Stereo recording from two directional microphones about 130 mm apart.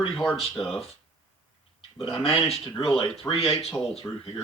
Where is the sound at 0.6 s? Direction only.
45° left (ahead or behind).